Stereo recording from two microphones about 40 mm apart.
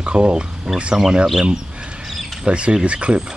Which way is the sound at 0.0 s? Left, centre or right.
Right.